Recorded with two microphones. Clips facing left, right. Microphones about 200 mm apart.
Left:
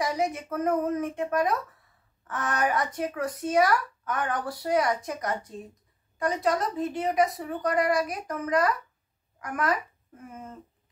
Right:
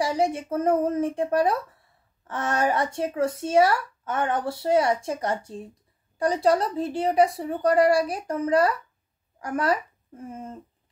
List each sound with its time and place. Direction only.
0.0 s a woman's voice: 30° right (ahead or behind)